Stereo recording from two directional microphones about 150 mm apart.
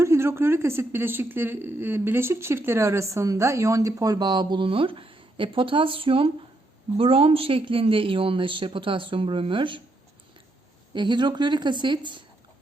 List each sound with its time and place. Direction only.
0.0 s a woman's voice: 15° right (ahead or behind); by 9.8 s 35° right (ahead or behind)
10.9 s speech: 30° right (ahead or behind)